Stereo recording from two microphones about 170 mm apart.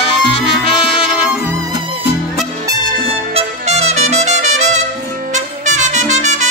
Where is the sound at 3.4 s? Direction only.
40° right (ahead or behind).